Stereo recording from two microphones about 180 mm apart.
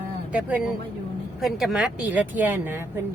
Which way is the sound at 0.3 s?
5° right (ahead or behind).